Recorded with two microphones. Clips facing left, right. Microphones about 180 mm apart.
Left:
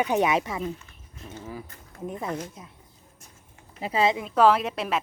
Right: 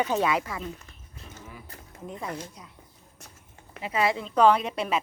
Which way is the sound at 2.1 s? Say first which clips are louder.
Left 4 dB; 25° left (ahead or behind).